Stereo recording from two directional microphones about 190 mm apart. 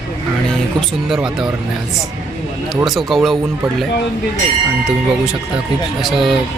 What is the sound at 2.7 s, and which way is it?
Speech, centre (ahead or behind).